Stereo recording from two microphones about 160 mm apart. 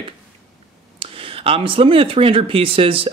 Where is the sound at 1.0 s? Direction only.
35° right (ahead or behind).